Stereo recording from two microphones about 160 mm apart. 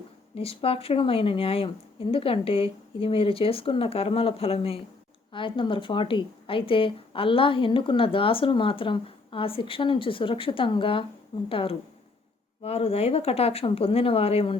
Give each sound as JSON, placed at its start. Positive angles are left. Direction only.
{"t": 0.3, "sound": "speech", "side_deg": 35}